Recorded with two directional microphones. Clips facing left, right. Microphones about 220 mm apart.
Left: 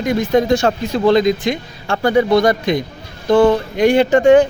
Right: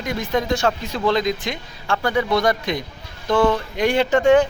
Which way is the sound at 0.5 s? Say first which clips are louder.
Left 6 dB; 15° left (ahead or behind).